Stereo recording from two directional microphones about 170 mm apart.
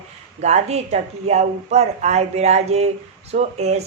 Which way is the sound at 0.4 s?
40° right (ahead or behind).